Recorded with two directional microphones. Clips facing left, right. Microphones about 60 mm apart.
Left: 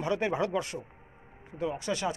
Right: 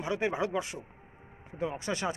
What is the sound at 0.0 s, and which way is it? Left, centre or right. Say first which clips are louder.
Speech: left 2 dB; centre.